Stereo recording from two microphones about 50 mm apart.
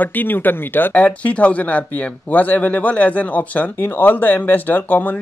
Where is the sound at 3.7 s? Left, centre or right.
Left.